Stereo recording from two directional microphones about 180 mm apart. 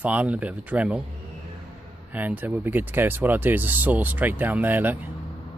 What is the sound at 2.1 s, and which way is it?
Speech, 10° right (ahead or behind).